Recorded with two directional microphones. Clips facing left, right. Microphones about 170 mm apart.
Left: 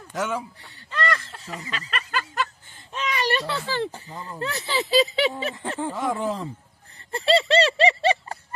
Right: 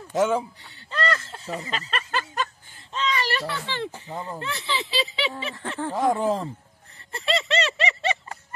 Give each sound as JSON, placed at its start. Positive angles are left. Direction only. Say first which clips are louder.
{"t": 0.1, "sound": "speech", "louder": "right 6 dB", "side_deg": -25}
{"t": 0.9, "sound": "snicker", "louder": "even", "side_deg": -30}
{"t": 2.9, "sound": "a child's voice", "louder": "left 1 dB", "side_deg": 10}
{"t": 4.4, "sound": "laughter", "louder": "left 7 dB", "side_deg": 40}
{"t": 5.9, "sound": "speech", "louder": "right 6 dB", "side_deg": -40}
{"t": 7.1, "sound": "laughter", "louder": "left 6 dB", "side_deg": 35}